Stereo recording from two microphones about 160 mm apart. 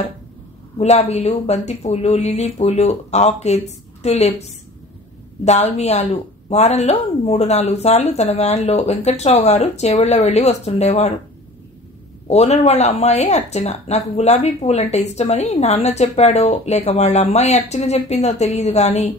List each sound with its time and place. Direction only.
0.7 s speech: 40° left (ahead or behind)
12.3 s speech: 40° left (ahead or behind)